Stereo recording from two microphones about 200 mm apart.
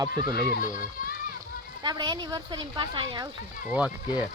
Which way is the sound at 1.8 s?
20° right (ahead or behind).